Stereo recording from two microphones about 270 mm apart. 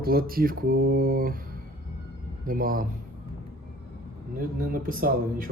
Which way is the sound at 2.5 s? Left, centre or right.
Right.